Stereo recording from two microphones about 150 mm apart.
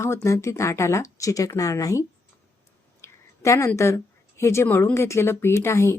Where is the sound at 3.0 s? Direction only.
20° left (ahead or behind).